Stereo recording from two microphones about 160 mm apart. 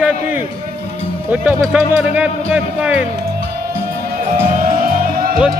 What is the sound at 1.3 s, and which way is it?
Speech, 10° right (ahead or behind).